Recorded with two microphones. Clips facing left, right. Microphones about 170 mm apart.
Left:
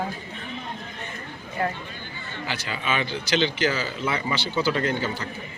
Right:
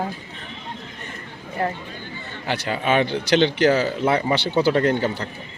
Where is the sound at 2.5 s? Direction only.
55° right (ahead or behind).